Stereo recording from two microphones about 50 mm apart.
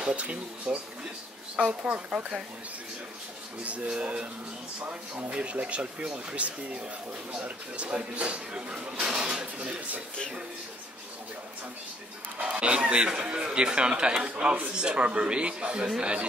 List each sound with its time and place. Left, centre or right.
0.0 s speech: right
3.6 s speech: right
12.4 s speech: right